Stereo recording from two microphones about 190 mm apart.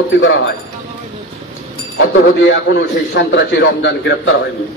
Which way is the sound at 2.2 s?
65° left (ahead or behind).